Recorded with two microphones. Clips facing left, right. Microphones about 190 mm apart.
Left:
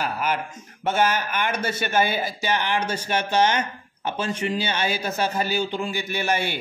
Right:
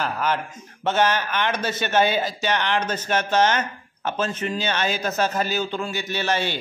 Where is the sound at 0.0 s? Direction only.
10° left (ahead or behind).